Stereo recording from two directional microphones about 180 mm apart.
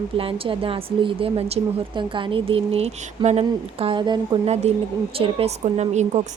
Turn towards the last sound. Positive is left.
turn(degrees=-40)  # may be behind; listen again after turning